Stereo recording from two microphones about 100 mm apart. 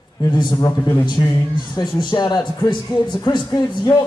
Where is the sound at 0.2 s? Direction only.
45° left (ahead or behind).